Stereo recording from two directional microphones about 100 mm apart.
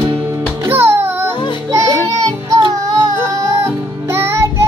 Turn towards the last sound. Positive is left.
turn(degrees=-25)  # may be behind; listen again after turning